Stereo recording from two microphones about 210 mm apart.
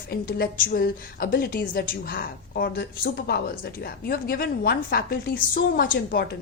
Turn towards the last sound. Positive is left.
turn(degrees=45)  # may be behind; listen again after turning